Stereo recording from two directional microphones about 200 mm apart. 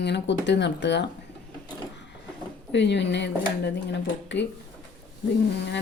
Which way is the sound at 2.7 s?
60° left (ahead or behind).